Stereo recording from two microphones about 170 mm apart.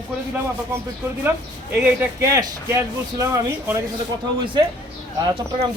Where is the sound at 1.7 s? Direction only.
10° right (ahead or behind).